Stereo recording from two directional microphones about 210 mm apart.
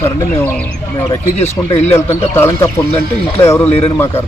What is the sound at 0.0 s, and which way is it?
Speech, 10° left (ahead or behind).